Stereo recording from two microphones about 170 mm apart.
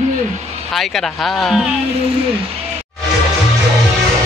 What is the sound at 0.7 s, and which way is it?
Speech, centre (ahead or behind).